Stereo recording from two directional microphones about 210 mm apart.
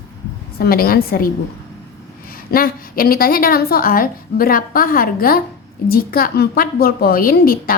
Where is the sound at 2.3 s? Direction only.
45° left (ahead or behind).